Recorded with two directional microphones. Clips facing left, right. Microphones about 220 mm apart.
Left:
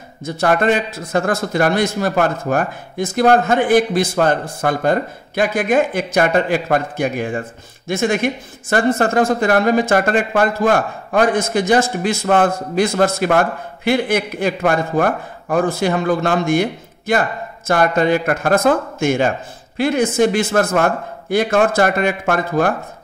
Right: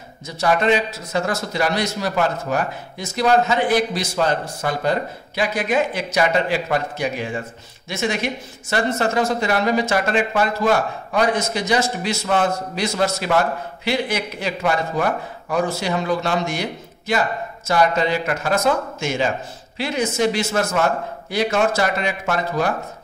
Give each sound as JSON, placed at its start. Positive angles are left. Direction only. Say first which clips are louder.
{"t": 0.2, "sound": "speech", "louder": "left 3 dB", "side_deg": 50}